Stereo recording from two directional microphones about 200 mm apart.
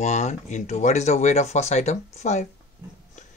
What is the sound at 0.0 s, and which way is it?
Speech, 35° left (ahead or behind).